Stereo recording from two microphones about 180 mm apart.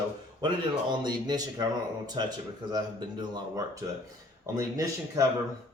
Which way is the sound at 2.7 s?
25° right (ahead or behind).